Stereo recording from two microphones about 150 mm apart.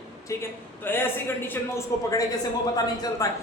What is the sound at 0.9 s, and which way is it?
A man's voice, 15° left (ahead or behind).